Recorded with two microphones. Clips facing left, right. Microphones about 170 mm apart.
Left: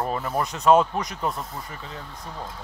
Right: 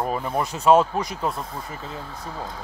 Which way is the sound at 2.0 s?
70° right (ahead or behind).